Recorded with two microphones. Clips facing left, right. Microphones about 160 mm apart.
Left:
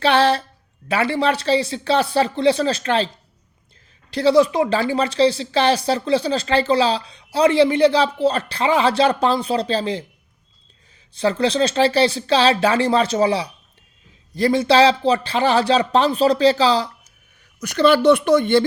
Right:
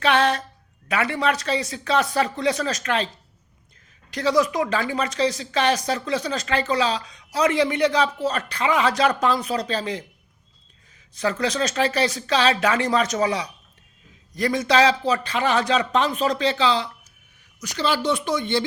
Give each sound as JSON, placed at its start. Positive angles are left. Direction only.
{"t": 0.0, "sound": "a woman's voice", "side_deg": 30}
{"t": 4.1, "sound": "a woman's voice", "side_deg": 30}
{"t": 11.1, "sound": "a woman's voice", "side_deg": 30}
{"t": 17.6, "sound": "a woman's voice", "side_deg": 55}